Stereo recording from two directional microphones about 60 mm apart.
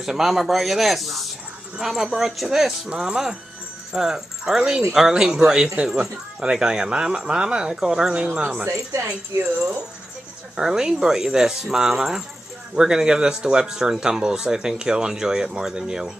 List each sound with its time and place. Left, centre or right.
0.0 s speech: centre
10.6 s speech: centre